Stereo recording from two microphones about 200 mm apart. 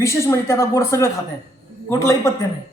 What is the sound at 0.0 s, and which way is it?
A man's voice, 15° left (ahead or behind).